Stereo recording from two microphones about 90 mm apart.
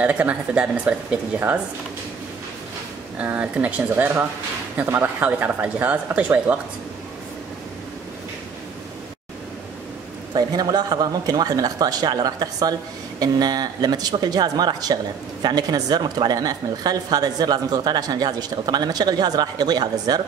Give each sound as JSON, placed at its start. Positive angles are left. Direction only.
{"t": 0.0, "sound": "speech", "side_deg": -15}
{"t": 3.2, "sound": "speech", "side_deg": -15}
{"t": 10.3, "sound": "speech", "side_deg": -45}